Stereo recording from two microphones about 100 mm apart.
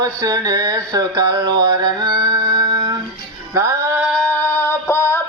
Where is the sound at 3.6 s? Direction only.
30° right (ahead or behind).